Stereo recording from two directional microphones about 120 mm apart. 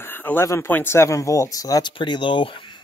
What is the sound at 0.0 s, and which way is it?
Speech, 15° left (ahead or behind).